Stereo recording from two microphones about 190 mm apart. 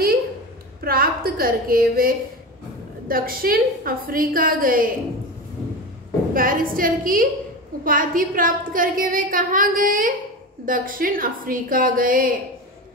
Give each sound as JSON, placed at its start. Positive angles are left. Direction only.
{"t": 0.7, "sound": "a woman's voice", "side_deg": -50}
{"t": 6.3, "sound": "a woman's voice", "side_deg": -45}